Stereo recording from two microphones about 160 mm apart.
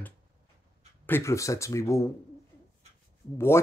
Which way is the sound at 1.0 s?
15° left (ahead or behind).